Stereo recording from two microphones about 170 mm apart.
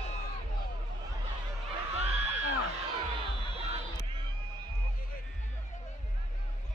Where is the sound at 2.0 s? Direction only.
40° right (ahead or behind).